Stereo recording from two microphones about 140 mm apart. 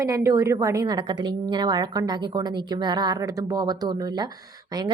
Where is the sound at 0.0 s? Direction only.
20° right (ahead or behind).